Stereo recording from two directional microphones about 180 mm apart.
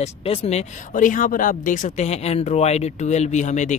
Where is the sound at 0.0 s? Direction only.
35° left (ahead or behind).